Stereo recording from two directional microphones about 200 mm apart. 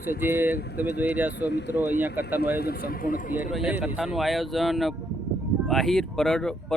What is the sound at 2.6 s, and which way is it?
Speech, 50° left (ahead or behind).